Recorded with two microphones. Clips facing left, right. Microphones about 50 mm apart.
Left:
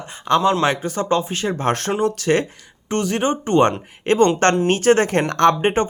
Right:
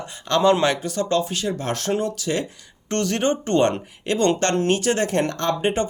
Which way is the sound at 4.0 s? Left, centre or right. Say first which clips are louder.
Left 5 dB; left.